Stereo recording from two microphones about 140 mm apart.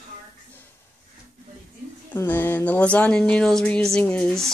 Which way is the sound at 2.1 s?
15° left (ahead or behind).